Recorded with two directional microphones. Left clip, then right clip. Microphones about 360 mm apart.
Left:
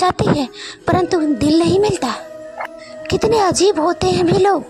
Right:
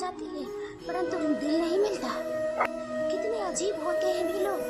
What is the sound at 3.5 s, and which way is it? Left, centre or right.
Speech, left.